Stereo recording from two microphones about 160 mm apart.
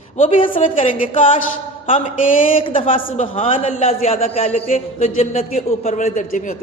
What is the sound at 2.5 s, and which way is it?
A man's voice, 35° left (ahead or behind).